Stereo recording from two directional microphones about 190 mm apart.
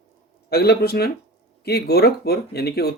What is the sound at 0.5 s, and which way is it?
Speech, 55° left (ahead or behind).